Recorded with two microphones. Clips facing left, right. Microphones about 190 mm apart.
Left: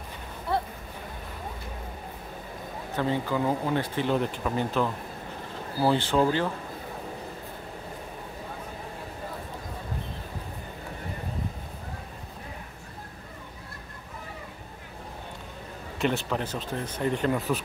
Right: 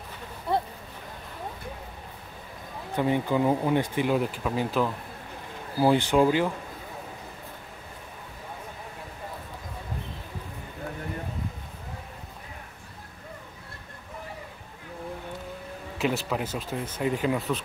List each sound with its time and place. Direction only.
0.5 s a sound: 15° right (ahead or behind)
3.0 s speech: 15° right (ahead or behind)
16.0 s speech: 5° right (ahead or behind)